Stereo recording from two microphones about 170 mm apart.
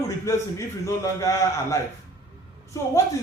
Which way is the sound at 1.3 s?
20° left (ahead or behind).